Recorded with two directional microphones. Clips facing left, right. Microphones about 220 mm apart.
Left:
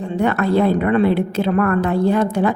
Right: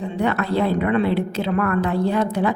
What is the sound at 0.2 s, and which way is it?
A woman's voice, 50° left (ahead or behind).